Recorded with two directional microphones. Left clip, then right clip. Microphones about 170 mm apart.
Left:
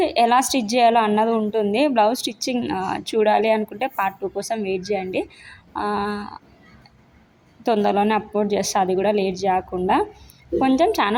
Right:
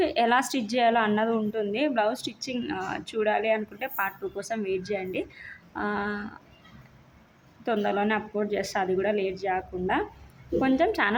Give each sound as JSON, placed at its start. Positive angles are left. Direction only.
{"t": 0.0, "sound": "a woman's voice", "side_deg": 20}
{"t": 7.6, "sound": "a woman's voice", "side_deg": 25}